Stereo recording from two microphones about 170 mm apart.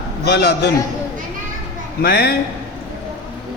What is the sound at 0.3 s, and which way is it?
Speech, 75° left (ahead or behind).